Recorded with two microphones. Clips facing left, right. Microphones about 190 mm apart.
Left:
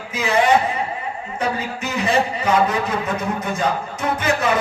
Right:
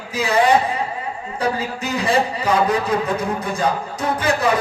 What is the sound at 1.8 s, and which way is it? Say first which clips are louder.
A man's voice: even; 35° right (ahead or behind).